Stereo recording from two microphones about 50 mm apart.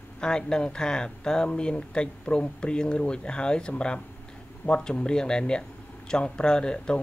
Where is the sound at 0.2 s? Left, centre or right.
Centre.